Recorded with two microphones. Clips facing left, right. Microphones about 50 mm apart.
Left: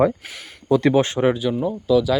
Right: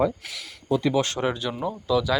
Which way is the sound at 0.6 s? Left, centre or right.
Left.